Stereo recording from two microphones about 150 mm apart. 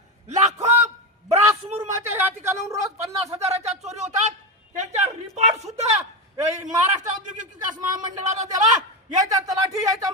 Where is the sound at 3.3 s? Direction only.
45° right (ahead or behind).